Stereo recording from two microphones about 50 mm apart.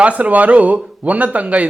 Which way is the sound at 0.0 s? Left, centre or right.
Right.